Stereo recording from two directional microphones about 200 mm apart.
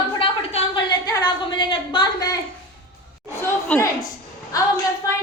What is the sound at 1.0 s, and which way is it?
A woman's voice, 20° left (ahead or behind).